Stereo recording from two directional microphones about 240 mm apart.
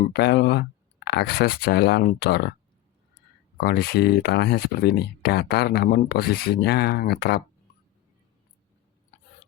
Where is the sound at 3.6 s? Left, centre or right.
Left.